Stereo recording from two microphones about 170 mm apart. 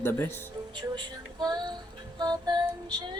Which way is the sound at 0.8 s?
25° right (ahead or behind).